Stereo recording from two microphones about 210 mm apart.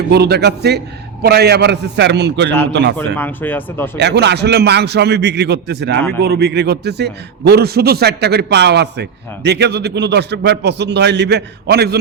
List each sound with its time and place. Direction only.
0.1 s a man's voice: 50° right (ahead or behind)
3.2 s speech: 10° left (ahead or behind)
3.9 s a man's voice: 55° right (ahead or behind)